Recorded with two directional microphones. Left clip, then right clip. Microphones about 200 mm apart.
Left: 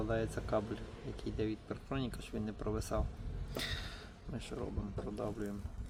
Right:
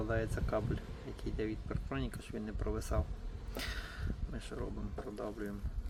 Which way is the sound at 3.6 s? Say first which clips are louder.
Left 2 dB; 5° left (ahead or behind).